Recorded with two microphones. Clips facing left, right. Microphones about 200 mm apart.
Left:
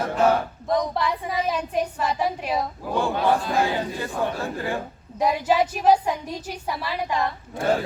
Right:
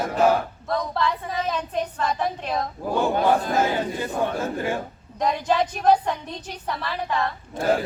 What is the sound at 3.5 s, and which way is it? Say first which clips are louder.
Speech: right 1 dB; 20° right (ahead or behind).